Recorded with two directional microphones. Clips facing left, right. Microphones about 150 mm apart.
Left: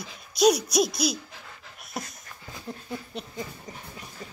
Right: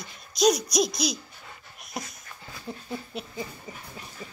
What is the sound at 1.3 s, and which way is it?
Dog, 90° left.